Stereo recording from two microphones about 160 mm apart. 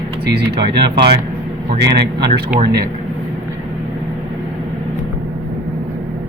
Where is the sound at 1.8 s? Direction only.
90° right.